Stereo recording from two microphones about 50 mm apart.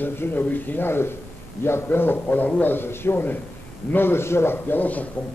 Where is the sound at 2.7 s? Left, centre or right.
Left.